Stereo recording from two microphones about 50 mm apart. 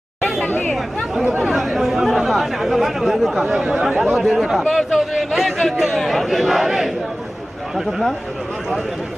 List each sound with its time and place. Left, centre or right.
0.5 s speech: left
1.5 s speech: centre
3.4 s speech: centre